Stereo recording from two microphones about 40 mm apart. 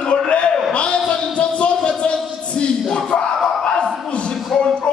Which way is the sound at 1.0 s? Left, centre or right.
Left.